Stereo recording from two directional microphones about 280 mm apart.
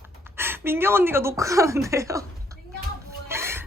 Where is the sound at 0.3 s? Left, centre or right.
Centre.